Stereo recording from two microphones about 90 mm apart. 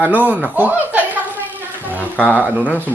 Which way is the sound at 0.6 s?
20° right (ahead or behind).